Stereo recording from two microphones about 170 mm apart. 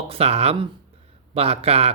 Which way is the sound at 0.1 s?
35° right (ahead or behind).